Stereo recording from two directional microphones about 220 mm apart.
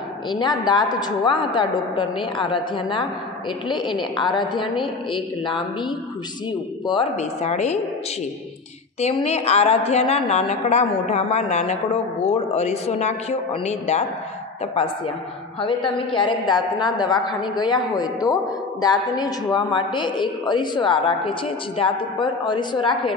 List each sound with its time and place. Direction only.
0.3 s a woman's voice: 20° left (ahead or behind)
6.9 s speech: 25° left (ahead or behind)
9.0 s a woman's voice: 30° left (ahead or behind)
15.6 s a woman's voice: 25° left (ahead or behind)